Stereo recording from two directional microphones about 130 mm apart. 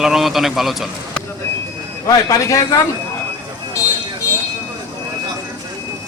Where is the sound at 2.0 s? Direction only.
25° left (ahead or behind).